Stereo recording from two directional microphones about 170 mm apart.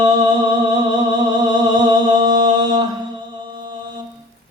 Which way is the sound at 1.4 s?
25° right (ahead or behind).